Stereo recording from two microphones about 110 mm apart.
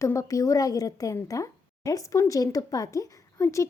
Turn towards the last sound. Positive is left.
turn(degrees=25)  # may be behind; listen again after turning